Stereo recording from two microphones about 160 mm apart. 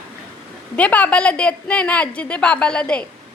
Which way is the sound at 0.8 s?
10° left (ahead or behind).